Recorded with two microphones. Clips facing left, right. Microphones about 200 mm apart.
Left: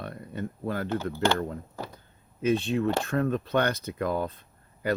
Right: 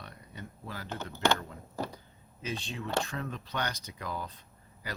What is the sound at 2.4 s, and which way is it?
Speech, 55° left (ahead or behind).